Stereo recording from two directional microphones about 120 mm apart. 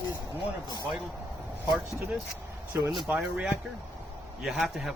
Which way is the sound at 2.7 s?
20° right (ahead or behind).